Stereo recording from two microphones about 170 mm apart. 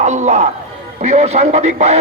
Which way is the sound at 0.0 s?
45° right (ahead or behind).